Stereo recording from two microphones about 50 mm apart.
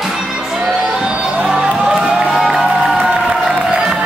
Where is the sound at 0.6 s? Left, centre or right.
Centre.